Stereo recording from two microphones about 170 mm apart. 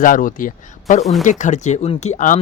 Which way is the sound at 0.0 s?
55° left (ahead or behind).